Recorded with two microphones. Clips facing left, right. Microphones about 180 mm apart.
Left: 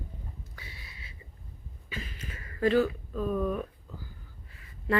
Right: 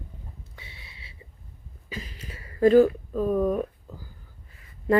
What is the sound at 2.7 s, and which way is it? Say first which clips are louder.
Speech: right 8 dB; 40° right (ahead or behind).